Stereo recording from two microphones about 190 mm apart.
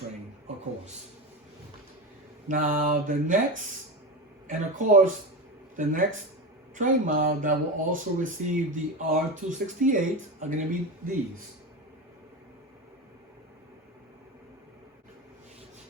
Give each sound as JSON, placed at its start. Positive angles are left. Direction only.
{"t": 2.5, "sound": "speech", "side_deg": -45}